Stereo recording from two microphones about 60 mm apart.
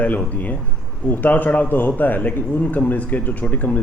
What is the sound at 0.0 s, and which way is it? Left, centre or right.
A man's voice, left.